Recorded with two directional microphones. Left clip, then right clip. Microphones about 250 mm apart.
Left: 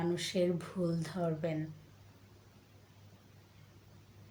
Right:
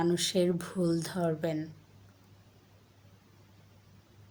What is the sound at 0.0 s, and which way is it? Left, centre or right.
A woman's voice, right.